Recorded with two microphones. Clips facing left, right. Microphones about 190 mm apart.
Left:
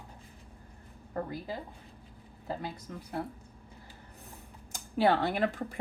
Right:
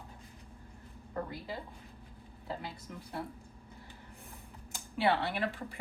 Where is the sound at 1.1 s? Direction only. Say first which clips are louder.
Left 3 dB; 45° left (ahead or behind).